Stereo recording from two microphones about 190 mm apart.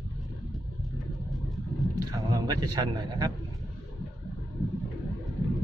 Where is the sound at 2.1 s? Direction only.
20° right (ahead or behind).